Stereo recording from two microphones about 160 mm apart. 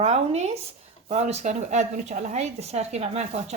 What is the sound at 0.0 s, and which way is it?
A woman's voice, 45° right (ahead or behind).